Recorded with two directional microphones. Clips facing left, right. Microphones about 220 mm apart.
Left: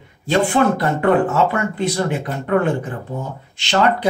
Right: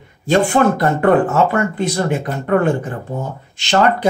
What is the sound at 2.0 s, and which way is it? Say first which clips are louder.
Speech: right 3 dB; 45° right (ahead or behind).